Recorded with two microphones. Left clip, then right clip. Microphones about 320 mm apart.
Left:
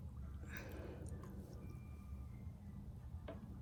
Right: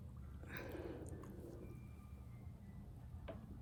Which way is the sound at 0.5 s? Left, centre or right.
Right.